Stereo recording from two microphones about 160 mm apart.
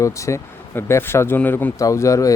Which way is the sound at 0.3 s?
20° left (ahead or behind).